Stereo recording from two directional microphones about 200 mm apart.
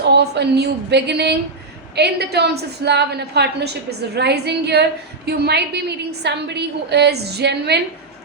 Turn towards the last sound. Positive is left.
turn(degrees=-55)  # may be behind; listen again after turning